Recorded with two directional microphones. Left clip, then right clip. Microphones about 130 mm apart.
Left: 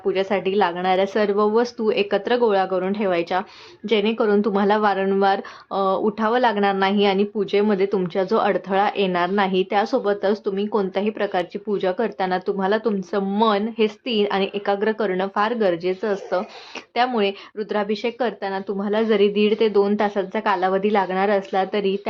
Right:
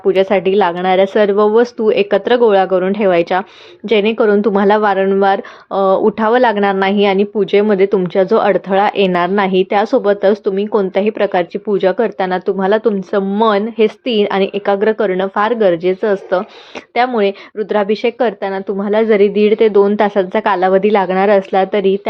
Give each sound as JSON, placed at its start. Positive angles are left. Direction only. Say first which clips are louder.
{"t": 0.0, "sound": "a woman's voice", "louder": "right 9 dB", "side_deg": -40}